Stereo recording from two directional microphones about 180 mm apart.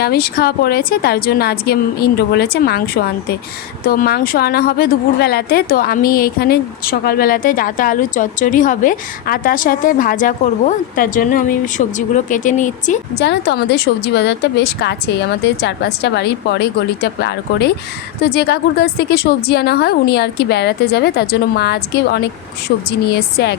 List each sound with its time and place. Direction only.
0.0 s a woman's voice: 60° left (ahead or behind); by 13.0 s 45° left (ahead or behind)
13.1 s a woman's voice: 65° left (ahead or behind)